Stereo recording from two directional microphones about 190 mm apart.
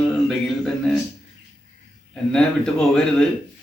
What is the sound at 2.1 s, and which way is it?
A man's voice, 5° left (ahead or behind).